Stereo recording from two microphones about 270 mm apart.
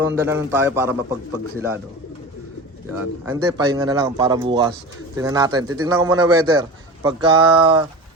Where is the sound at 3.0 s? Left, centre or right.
Centre.